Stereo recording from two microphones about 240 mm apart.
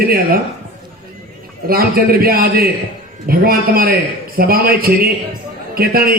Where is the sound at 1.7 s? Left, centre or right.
Right.